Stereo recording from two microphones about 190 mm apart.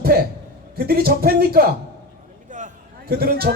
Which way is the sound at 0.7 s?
55° right (ahead or behind).